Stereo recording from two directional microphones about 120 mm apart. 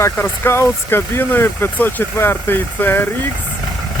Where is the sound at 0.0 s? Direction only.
20° left (ahead or behind).